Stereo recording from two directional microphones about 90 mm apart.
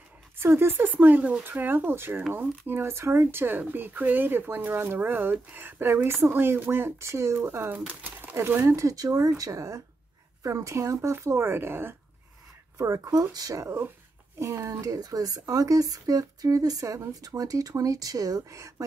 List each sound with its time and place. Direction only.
0.4 s speech: 25° right (ahead or behind)
12.7 s speech: 35° right (ahead or behind)